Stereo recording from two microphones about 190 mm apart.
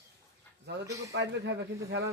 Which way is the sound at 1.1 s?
65° right (ahead or behind).